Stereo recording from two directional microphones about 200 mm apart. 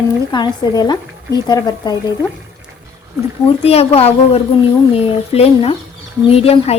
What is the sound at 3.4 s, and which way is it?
A woman's voice, 30° left (ahead or behind).